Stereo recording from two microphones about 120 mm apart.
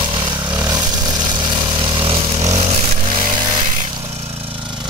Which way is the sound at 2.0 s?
60° right (ahead or behind).